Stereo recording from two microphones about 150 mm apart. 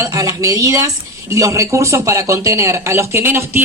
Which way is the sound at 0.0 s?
20° right (ahead or behind).